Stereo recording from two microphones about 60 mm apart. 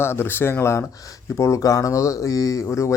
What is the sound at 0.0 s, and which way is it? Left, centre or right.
A man's voice, left.